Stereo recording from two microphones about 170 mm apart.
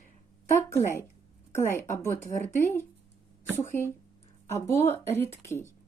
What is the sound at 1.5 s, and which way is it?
A woman's voice, 15° left (ahead or behind).